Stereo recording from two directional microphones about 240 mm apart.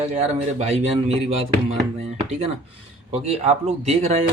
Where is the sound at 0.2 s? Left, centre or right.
Right.